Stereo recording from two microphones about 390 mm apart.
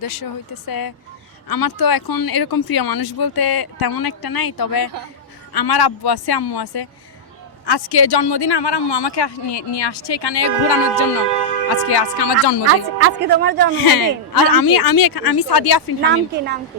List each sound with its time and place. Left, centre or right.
0.0 s speech: left
11.9 s speech: left
13.0 s speech: right
13.8 s speech: left
16.0 s speech: right